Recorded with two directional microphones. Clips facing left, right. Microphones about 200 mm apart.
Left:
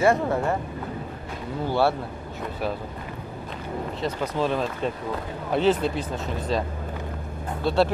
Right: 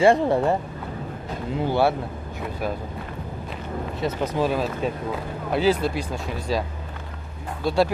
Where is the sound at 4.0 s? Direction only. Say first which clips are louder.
Right 3 dB; 10° right (ahead or behind).